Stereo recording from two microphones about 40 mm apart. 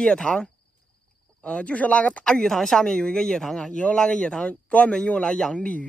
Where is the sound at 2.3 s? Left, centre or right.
Centre.